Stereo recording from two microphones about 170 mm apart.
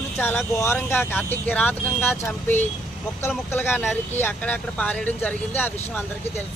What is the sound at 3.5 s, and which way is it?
Speech, 10° left (ahead or behind).